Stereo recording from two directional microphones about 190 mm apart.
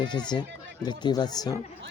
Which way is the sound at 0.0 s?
25° left (ahead or behind).